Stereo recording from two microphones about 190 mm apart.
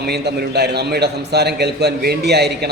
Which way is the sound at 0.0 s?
60° right (ahead or behind).